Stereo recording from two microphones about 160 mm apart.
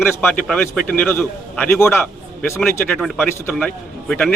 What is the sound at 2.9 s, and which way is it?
A man's voice, centre (ahead or behind).